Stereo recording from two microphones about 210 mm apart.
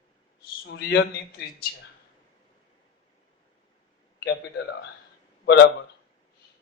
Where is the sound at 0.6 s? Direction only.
55° left (ahead or behind).